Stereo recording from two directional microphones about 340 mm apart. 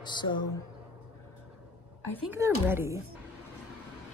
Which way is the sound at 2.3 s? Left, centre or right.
Centre.